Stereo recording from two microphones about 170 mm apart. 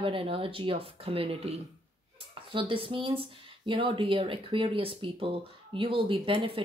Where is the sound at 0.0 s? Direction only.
30° right (ahead or behind).